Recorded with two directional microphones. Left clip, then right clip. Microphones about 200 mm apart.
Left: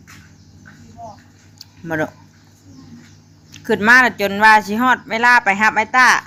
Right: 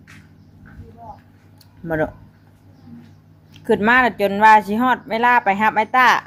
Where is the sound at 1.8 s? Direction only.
15° right (ahead or behind).